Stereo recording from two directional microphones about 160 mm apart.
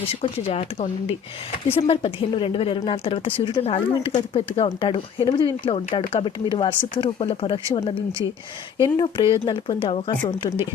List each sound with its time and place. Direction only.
0.1 s a woman's voice: 40° left (ahead or behind)